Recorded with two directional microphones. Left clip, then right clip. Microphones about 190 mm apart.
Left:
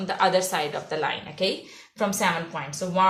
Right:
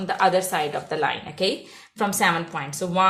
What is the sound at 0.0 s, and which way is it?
A woman's voice, 30° right (ahead or behind).